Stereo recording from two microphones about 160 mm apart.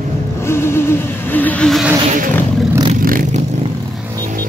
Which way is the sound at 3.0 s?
60° right (ahead or behind).